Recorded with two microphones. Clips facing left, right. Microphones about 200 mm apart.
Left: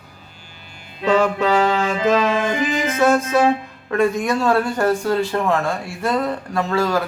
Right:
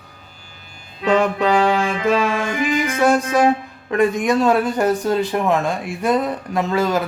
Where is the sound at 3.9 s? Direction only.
15° right (ahead or behind).